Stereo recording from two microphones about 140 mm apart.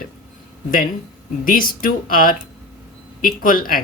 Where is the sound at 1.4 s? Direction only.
90° left.